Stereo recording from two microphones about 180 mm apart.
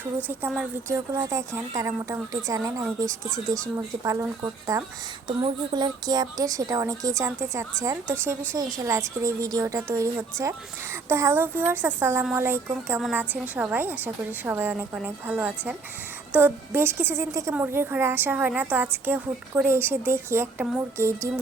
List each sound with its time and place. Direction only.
0.3 s a woman's voice: 5° right (ahead or behind)
0.9 s a woman's voice: 15° right (ahead or behind)